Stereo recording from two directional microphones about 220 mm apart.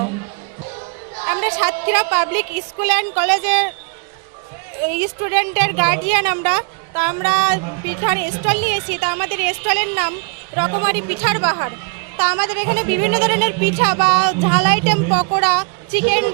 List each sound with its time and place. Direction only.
1.2 s a woman's voice: 15° right (ahead or behind)
4.9 s speech: 10° right (ahead or behind)